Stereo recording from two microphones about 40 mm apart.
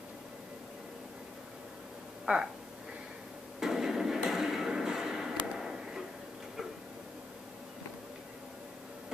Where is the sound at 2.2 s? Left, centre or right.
Centre.